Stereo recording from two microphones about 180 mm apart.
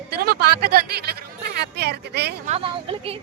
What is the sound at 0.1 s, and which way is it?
A woman's voice, 60° right (ahead or behind).